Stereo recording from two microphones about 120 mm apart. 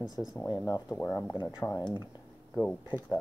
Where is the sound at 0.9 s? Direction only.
15° left (ahead or behind).